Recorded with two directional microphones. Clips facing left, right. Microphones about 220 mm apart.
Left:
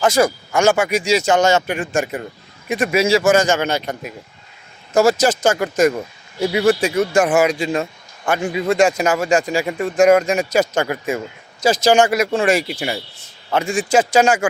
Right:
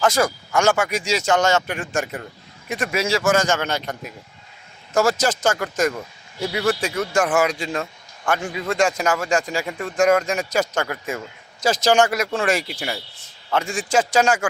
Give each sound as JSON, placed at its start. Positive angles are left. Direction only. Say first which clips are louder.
{"t": 0.0, "sound": "a man's voice", "louder": "left 4 dB", "side_deg": 0}
{"t": 6.8, "sound": "a man's voice", "louder": "left 5 dB", "side_deg": 5}
{"t": 8.4, "sound": "a man's voice", "louder": "left 7 dB", "side_deg": 20}
{"t": 9.0, "sound": "a man's voice", "louder": "left 4 dB", "side_deg": 10}
{"t": 11.6, "sound": "a man's voice", "louder": "left 3 dB", "side_deg": 0}